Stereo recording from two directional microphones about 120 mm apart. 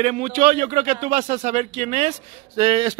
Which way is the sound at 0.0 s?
75° right (ahead or behind).